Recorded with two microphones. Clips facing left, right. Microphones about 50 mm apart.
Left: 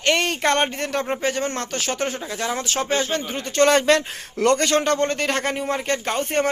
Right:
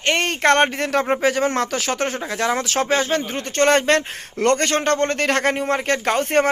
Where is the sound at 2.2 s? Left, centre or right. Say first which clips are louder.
Right 4 dB; right.